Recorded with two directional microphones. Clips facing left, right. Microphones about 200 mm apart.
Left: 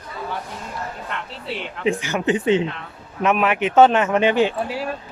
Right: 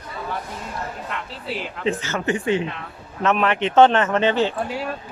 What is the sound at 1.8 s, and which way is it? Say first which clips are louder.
Speech: left 3 dB; 15° left (ahead or behind).